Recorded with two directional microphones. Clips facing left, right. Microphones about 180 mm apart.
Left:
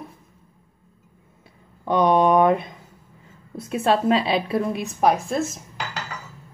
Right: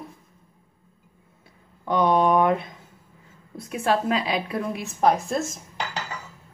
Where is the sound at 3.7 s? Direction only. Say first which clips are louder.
Left 4 dB; 25° left (ahead or behind).